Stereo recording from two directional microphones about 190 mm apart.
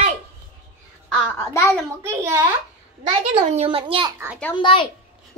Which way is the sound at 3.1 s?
30° right (ahead or behind).